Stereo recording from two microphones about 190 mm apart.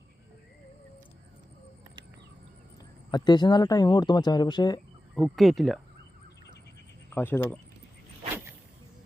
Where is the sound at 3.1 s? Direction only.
20° left (ahead or behind).